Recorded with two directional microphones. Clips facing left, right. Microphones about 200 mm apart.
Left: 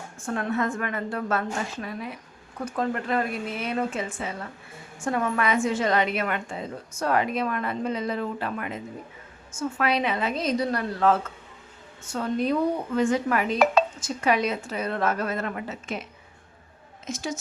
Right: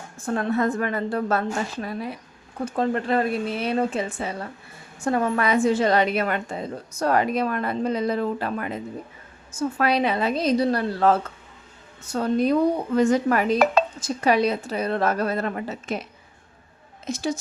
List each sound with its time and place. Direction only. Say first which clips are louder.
0.2 s a woman's voice: right 4 dB; 35° right (ahead or behind)
17.1 s a woman's voice: right 5 dB; 35° right (ahead or behind)